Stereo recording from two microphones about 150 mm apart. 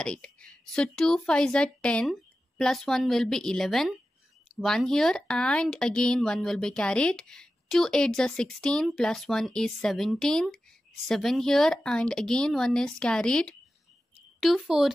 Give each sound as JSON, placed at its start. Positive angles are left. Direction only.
{"t": 0.0, "sound": "speech", "side_deg": 5}